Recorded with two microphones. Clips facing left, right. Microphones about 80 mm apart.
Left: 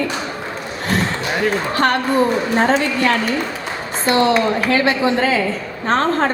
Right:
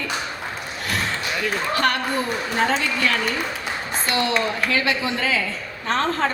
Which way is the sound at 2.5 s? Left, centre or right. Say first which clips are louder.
Left 4 dB; left.